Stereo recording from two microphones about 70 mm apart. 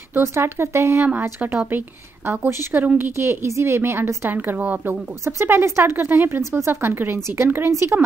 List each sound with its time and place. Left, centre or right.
0.1 s speech: right
1.7 s speech: right
4.6 s speech: centre
4.8 s speech: right